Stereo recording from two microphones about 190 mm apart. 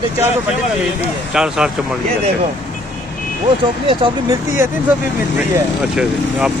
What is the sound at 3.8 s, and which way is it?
Speech, 25° right (ahead or behind).